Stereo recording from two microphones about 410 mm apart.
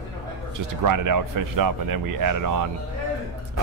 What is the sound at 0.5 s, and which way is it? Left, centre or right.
Speech, right.